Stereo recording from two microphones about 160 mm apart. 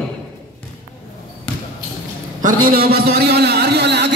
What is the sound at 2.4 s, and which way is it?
A man's voice, 65° right (ahead or behind).